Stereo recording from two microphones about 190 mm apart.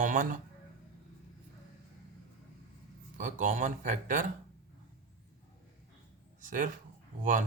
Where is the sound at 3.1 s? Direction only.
40° right (ahead or behind).